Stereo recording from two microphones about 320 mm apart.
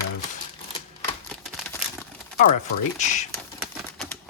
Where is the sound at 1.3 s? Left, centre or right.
Centre.